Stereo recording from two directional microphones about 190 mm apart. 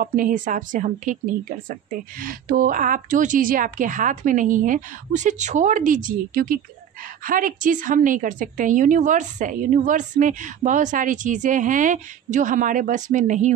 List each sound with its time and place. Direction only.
0.0 s a woman's voice: 45° right (ahead or behind)